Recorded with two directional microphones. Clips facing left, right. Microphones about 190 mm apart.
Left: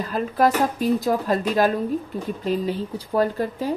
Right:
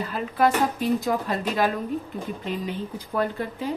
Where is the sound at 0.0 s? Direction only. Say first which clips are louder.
Left 2 dB; 40° left (ahead or behind).